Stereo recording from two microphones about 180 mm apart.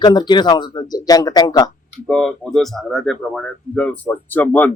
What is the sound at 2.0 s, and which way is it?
Speech, 5° left (ahead or behind).